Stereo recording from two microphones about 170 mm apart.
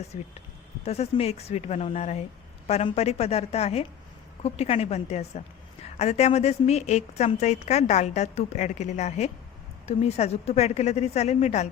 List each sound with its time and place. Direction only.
0.1 s a woman's voice: 45° left (ahead or behind)